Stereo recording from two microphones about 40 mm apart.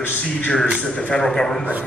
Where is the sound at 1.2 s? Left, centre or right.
Centre.